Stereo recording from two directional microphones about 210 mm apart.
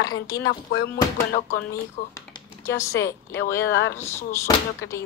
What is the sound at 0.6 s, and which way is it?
Speech, 45° left (ahead or behind).